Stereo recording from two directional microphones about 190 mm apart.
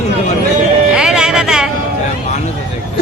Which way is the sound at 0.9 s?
5° right (ahead or behind).